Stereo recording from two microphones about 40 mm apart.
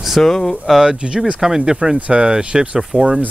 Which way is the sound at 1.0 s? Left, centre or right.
Right.